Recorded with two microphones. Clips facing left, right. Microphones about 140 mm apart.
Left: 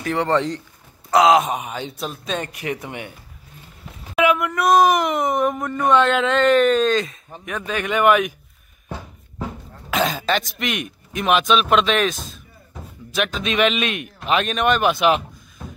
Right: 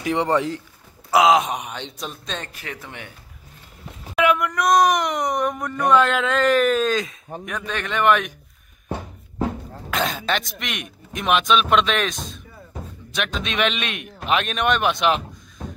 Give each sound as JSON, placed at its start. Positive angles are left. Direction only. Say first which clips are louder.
{"t": 0.0, "sound": "speech", "louder": "left 1 dB", "side_deg": -15}
{"t": 4.1, "sound": "speech", "louder": "left 1 dB", "side_deg": 0}
{"t": 9.8, "sound": "speech", "louder": "left 3 dB", "side_deg": 0}